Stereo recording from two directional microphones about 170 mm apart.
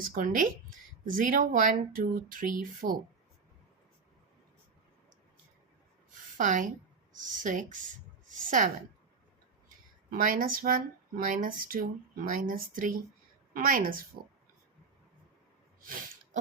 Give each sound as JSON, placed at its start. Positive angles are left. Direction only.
{"t": 0.1, "sound": "speech", "side_deg": -55}
{"t": 6.3, "sound": "a woman's voice", "side_deg": -50}
{"t": 10.1, "sound": "speech", "side_deg": -55}
{"t": 15.8, "sound": "a sound", "side_deg": -55}